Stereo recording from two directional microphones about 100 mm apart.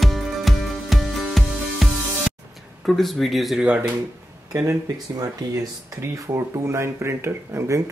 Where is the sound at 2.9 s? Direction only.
Centre (ahead or behind).